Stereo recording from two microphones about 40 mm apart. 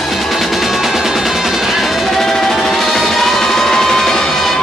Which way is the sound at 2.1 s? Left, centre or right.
Centre.